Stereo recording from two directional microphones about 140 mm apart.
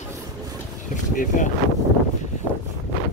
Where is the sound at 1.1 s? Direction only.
70° left (ahead or behind).